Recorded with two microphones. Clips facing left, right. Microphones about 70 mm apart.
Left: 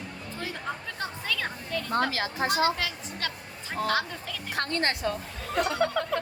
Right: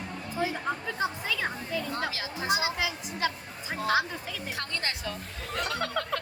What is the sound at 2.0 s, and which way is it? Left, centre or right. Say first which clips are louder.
Speech: left 5 dB; left.